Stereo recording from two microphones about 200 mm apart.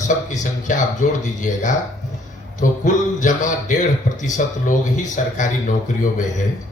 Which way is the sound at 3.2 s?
40° left (ahead or behind).